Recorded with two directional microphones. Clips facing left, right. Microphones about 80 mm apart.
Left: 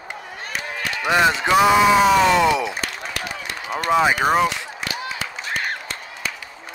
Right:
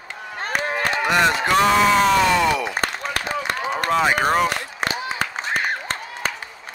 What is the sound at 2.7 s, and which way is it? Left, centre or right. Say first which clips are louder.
Applause: right 4 dB; right.